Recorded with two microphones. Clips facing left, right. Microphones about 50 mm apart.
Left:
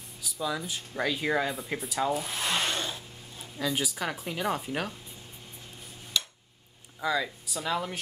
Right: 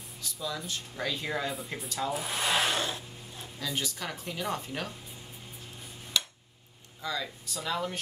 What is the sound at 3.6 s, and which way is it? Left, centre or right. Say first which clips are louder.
Speech: left 5 dB; centre.